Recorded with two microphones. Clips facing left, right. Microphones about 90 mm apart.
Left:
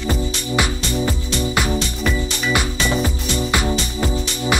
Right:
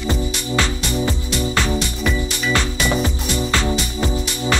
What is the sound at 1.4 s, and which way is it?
Music, 15° left (ahead or behind).